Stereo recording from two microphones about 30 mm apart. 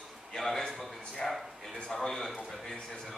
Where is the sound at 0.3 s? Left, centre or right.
Centre.